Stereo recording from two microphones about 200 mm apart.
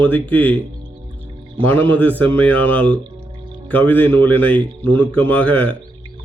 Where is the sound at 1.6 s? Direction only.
10° left (ahead or behind).